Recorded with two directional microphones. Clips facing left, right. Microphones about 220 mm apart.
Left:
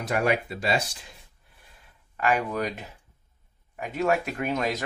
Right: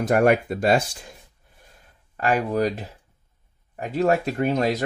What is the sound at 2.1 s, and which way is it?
Speech, 35° right (ahead or behind).